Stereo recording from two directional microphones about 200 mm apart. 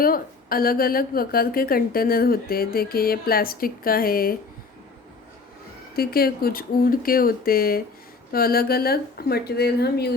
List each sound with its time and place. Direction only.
0.0 s a woman's voice: 45° left (ahead or behind)
6.0 s a woman's voice: 50° left (ahead or behind)